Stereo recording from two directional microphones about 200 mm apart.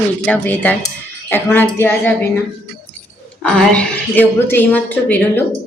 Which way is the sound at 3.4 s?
5° left (ahead or behind).